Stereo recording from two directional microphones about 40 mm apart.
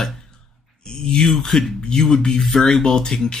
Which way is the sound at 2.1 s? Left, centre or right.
Centre.